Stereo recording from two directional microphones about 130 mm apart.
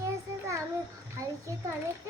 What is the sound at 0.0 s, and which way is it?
Child singing, 25° right (ahead or behind).